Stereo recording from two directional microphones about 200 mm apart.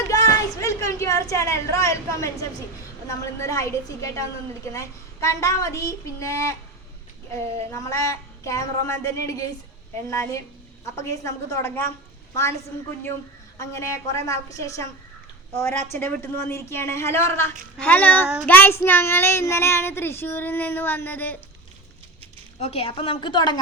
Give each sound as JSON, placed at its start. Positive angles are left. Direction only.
{"t": 0.1, "sound": "a sound", "side_deg": 15}
{"t": 3.1, "sound": "child singing", "side_deg": 15}
{"t": 10.1, "sound": "child singing", "side_deg": 15}
{"t": 12.3, "sound": "a woman's voice", "side_deg": 15}
{"t": 13.6, "sound": "child singing", "side_deg": 15}
{"t": 22.6, "sound": "a woman's voice", "side_deg": 30}